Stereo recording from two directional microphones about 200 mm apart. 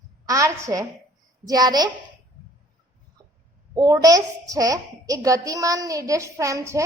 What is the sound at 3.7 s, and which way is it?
A child's voice, 20° right (ahead or behind).